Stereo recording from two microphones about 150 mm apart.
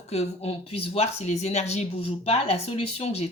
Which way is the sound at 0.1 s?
45° left (ahead or behind).